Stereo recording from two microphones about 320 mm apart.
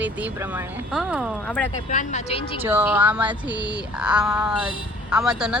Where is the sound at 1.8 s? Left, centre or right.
Left.